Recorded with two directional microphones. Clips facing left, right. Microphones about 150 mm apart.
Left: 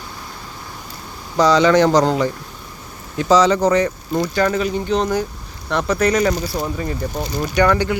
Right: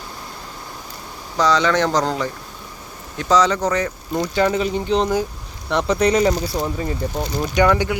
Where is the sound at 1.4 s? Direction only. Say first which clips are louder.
Left 4 dB; 5° left (ahead or behind).